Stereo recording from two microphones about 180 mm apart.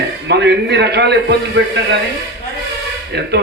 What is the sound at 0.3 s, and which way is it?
A man's voice, 70° right (ahead or behind).